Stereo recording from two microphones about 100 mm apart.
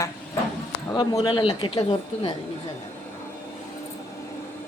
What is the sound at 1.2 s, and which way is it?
Speech, 55° left (ahead or behind).